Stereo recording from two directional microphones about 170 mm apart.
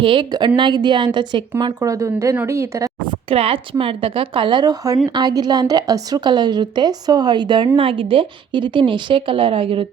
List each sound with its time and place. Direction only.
0.0 s a woman's voice: 30° right (ahead or behind)
1.8 s speech: 20° right (ahead or behind)
3.2 s a woman's voice: 35° right (ahead or behind)